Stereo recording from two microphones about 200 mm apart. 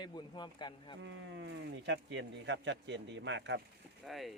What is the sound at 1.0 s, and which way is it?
Speech, 65° right (ahead or behind).